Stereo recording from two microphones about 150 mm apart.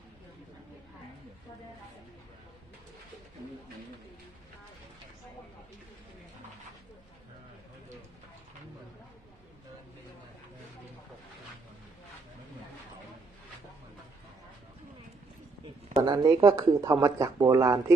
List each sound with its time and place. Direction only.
16.0 s speech: 25° right (ahead or behind)